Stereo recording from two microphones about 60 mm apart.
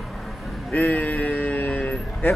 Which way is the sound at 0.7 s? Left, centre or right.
Left.